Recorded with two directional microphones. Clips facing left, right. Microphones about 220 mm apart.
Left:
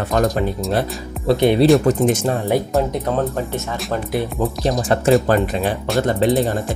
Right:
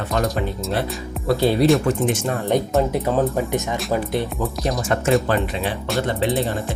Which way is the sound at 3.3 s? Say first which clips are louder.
Right 2 dB; 15° right (ahead or behind).